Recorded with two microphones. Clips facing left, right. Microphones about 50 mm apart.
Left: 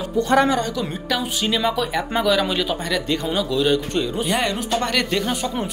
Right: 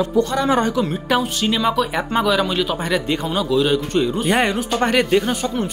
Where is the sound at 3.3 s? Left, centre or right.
Centre.